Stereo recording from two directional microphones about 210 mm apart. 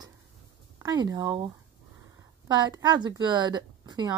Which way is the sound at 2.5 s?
20° right (ahead or behind).